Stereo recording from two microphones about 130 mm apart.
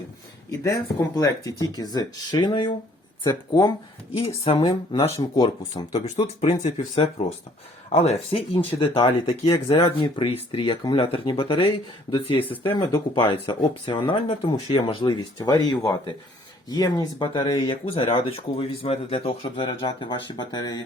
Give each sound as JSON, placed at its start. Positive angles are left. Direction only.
{"t": 0.6, "sound": "speech", "side_deg": 25}
{"t": 4.4, "sound": "speech", "side_deg": 45}
{"t": 5.3, "sound": "speech", "side_deg": 30}
{"t": 6.1, "sound": "speech", "side_deg": 55}
{"t": 6.9, "sound": "speech", "side_deg": 50}